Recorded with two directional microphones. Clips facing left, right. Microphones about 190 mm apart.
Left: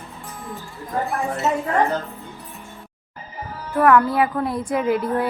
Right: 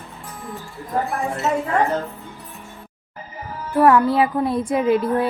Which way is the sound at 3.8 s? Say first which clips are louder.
Right 1 dB; 25° right (ahead or behind).